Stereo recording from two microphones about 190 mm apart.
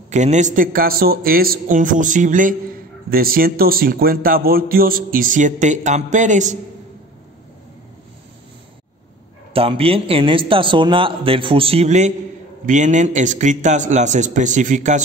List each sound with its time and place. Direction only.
0.1 s speech: 40° right (ahead or behind)
9.5 s a man's voice: 30° right (ahead or behind)